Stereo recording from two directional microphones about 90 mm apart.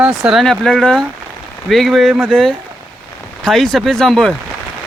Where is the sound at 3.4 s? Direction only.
5° left (ahead or behind).